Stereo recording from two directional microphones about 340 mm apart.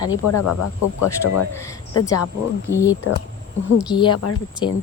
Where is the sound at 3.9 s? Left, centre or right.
Centre.